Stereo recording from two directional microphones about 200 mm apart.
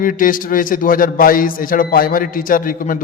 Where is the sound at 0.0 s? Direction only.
45° left (ahead or behind).